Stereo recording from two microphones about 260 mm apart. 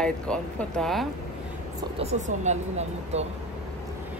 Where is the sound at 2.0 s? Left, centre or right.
Right.